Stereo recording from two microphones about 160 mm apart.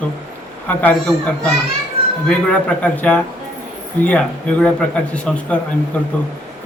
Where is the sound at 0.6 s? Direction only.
10° left (ahead or behind).